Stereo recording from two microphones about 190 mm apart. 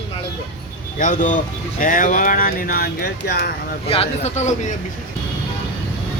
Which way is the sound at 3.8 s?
30° left (ahead or behind).